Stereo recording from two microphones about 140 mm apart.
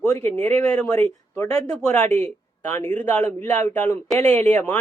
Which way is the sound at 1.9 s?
10° left (ahead or behind).